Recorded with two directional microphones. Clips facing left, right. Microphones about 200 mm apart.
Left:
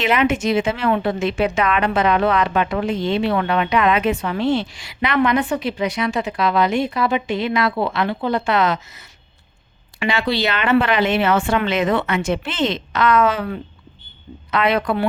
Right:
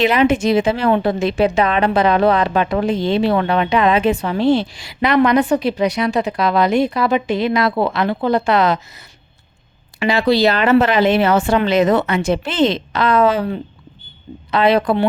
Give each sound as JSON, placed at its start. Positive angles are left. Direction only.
{"t": 0.0, "sound": "speech", "side_deg": -35}
{"t": 10.0, "sound": "speech", "side_deg": -35}